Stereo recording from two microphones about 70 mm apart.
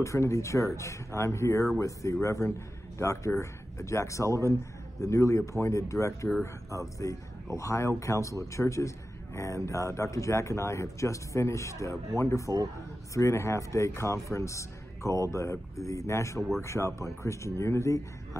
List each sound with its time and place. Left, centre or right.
0.0 s a man's voice: left